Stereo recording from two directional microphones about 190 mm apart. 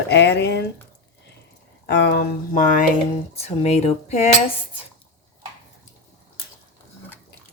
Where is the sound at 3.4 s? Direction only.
35° left (ahead or behind).